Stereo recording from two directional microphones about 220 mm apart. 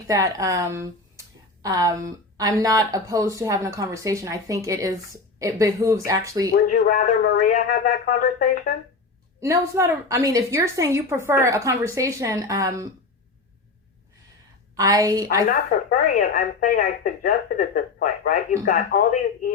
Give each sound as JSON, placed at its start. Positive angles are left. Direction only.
{"t": 0.1, "sound": "a woman's voice", "side_deg": -15}
{"t": 6.5, "sound": "speech", "side_deg": 35}
{"t": 9.4, "sound": "a woman's voice", "side_deg": -15}
{"t": 14.8, "sound": "a woman's voice", "side_deg": -15}
{"t": 15.4, "sound": "speech", "side_deg": 35}